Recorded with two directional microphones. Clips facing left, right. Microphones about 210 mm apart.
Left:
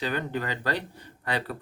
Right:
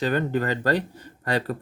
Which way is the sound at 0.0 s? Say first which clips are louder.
Right 6 dB; 45° right (ahead or behind).